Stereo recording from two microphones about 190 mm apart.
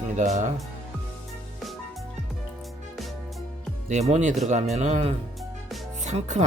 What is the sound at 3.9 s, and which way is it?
Speech, 35° right (ahead or behind).